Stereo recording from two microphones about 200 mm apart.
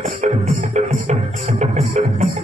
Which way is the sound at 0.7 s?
35° right (ahead or behind).